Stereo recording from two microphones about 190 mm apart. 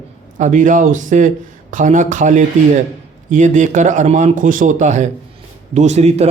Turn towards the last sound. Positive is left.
turn(degrees=-35)  # may be behind; listen again after turning